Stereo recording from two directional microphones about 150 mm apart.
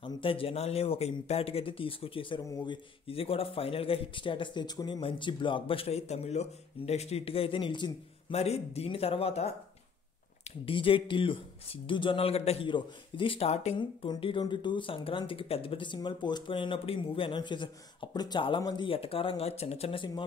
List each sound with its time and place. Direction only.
0.0 s speech: 35° left (ahead or behind)
8.4 s speech: 45° left (ahead or behind)
10.6 s speech: 35° left (ahead or behind)
13.7 s speech: 30° left (ahead or behind)